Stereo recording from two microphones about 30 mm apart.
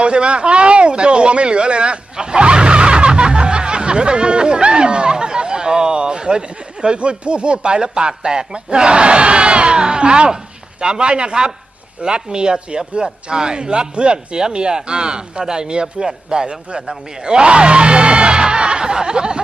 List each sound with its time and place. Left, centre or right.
0.0 s speech: right
2.1 s snicker: right
6.8 s a man's voice: right